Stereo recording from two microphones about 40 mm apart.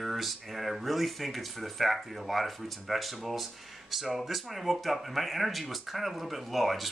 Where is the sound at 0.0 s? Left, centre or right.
Centre.